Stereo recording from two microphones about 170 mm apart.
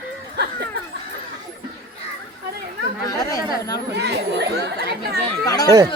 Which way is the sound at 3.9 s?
75° right (ahead or behind).